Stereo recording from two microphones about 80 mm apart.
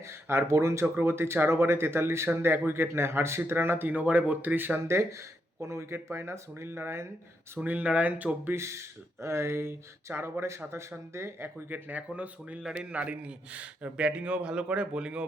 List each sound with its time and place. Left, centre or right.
0.1 s speech: right
7.6 s speech: centre
8.5 s a man's voice: right; by 15.2 s centre